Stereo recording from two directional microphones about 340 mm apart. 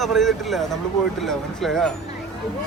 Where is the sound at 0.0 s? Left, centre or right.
Centre.